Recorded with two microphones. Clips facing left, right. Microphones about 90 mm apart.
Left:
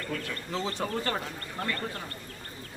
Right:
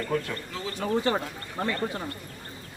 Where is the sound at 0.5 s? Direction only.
25° left (ahead or behind).